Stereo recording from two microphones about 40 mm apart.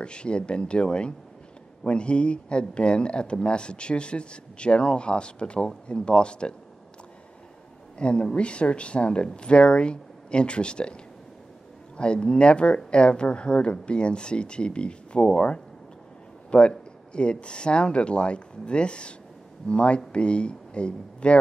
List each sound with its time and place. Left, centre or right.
0.0 s speech: left
8.0 s speech: left
12.0 s speech: left